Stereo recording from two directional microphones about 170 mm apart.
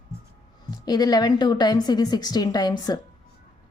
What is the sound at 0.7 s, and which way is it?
A woman's voice, 25° left (ahead or behind).